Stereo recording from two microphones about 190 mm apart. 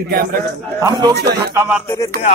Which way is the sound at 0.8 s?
20° right (ahead or behind).